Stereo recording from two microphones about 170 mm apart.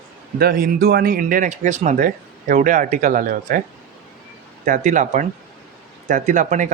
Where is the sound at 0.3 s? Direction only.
60° right (ahead or behind).